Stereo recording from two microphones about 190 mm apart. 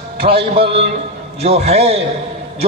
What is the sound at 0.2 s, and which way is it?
A man's voice, 30° right (ahead or behind).